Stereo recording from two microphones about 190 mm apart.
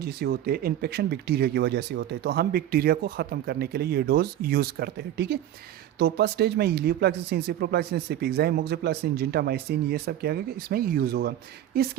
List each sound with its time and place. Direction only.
0.0 s speech: 55° right (ahead or behind)